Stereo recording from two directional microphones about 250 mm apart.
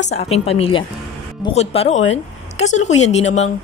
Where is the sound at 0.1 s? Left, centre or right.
Left.